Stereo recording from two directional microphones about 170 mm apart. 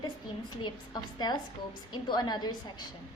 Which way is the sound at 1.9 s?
25° left (ahead or behind).